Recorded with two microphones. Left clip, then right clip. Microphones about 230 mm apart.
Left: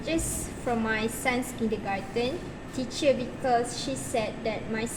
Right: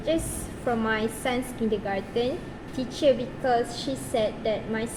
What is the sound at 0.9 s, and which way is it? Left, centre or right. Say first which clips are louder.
Speech: right 1 dB; right.